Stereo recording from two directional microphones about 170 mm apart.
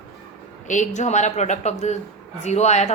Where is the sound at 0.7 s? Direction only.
45° left (ahead or behind).